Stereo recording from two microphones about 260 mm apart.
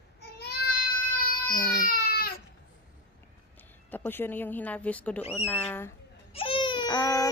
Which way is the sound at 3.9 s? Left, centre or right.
Centre.